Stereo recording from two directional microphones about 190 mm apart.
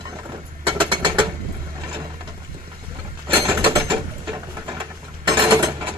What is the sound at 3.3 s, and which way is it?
Wood, 15° right (ahead or behind).